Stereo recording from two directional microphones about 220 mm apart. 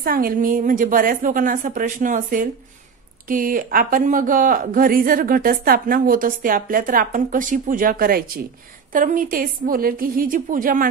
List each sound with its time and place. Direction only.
0.0 s speech: 40° right (ahead or behind)